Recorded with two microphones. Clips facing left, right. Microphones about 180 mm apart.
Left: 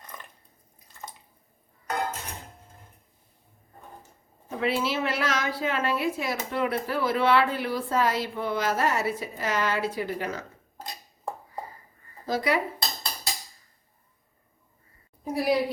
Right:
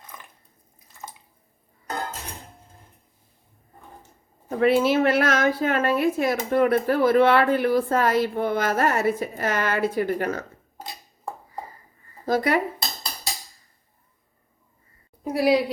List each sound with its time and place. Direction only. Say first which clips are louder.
4.4 s a woman's voice: right 8 dB; 50° right (ahead or behind)
12.2 s speech: right 4 dB; 50° right (ahead or behind)
15.2 s a sound: right 5 dB; 70° right (ahead or behind)